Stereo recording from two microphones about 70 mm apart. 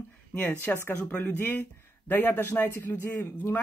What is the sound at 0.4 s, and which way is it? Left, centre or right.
Speech, left.